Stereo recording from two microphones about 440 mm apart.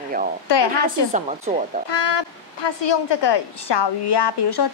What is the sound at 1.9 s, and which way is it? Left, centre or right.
A woman's voice, left.